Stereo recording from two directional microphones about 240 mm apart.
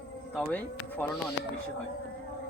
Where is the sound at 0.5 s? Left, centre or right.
Centre.